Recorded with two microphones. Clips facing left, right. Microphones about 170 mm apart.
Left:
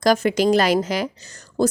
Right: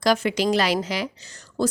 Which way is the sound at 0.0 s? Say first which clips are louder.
Left 4 dB; 45° left (ahead or behind).